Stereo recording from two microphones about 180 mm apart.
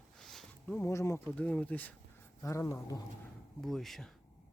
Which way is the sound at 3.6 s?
Centre (ahead or behind).